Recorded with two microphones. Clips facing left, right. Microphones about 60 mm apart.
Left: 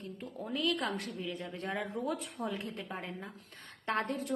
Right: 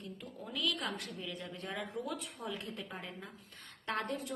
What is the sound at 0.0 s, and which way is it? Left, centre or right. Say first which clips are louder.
A woman's voice: left 4 dB; left.